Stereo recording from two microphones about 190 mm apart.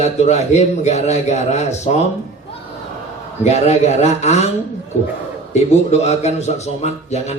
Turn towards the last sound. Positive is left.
turn(degrees=35)  # may be behind; listen again after turning